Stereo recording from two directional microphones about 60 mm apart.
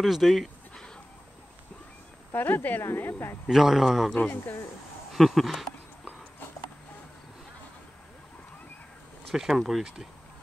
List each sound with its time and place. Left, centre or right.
0.0 s bleat: centre
2.3 s speech: left
2.8 s speech: left
3.4 s speech: centre
5.1 s speech: centre
9.3 s speech: centre